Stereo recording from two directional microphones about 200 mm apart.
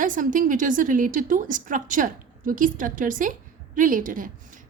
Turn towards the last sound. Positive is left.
turn(degrees=-40)  # may be behind; listen again after turning